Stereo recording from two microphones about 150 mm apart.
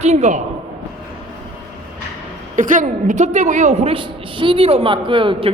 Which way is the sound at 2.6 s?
60° right (ahead or behind).